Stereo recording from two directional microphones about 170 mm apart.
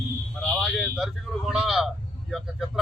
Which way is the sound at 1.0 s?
Centre (ahead or behind).